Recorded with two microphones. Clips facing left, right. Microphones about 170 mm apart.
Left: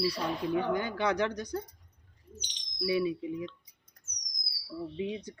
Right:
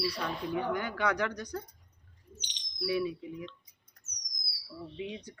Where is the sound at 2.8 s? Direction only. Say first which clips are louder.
Left 2 dB; 20° left (ahead or behind).